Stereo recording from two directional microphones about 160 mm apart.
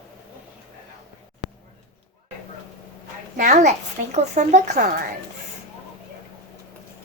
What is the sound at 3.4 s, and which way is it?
Speech, 50° right (ahead or behind).